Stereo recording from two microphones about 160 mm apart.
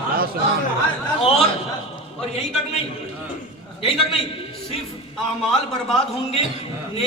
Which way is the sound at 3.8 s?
35° left (ahead or behind).